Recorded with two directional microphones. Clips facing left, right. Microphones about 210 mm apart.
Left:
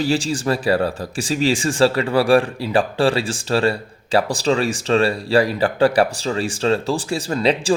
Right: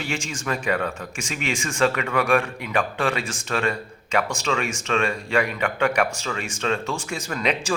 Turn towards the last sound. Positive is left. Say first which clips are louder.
# left 7 dB
turn(degrees=30)  # may be behind; listen again after turning